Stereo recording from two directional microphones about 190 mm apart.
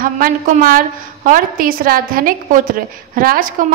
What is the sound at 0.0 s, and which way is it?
A woman's voice, 50° right (ahead or behind).